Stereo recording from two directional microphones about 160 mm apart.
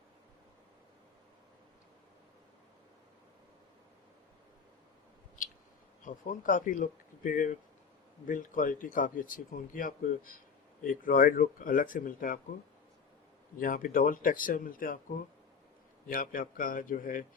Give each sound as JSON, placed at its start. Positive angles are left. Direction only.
{"t": 6.1, "sound": "speech", "side_deg": 55}
{"t": 13.6, "sound": "speech", "side_deg": 60}
{"t": 16.0, "sound": "speech", "side_deg": 60}